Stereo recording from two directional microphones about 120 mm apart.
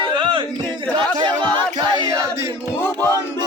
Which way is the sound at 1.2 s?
40° right (ahead or behind).